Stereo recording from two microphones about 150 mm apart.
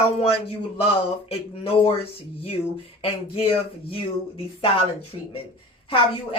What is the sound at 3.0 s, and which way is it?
Speech, 40° left (ahead or behind).